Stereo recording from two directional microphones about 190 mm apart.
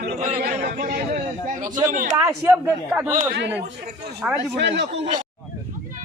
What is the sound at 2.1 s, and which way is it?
Speech, 15° right (ahead or behind).